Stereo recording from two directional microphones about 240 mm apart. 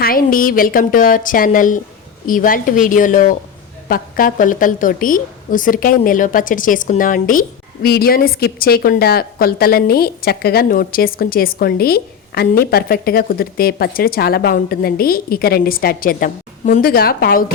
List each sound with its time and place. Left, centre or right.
0.0 s a woman's voice: left